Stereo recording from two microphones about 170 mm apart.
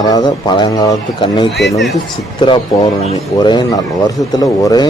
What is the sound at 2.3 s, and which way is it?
A man's voice, 30° left (ahead or behind).